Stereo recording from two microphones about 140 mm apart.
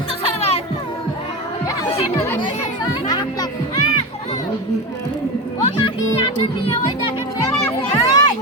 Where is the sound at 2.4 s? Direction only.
30° left (ahead or behind).